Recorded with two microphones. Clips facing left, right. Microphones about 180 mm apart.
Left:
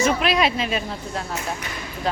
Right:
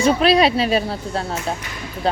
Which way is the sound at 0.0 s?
35° right (ahead or behind).